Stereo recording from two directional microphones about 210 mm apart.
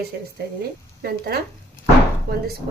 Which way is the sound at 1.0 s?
45° right (ahead or behind).